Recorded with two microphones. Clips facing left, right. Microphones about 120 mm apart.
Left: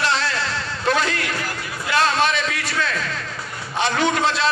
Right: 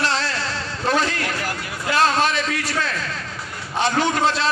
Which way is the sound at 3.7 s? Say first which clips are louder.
Even; 40° right (ahead or behind).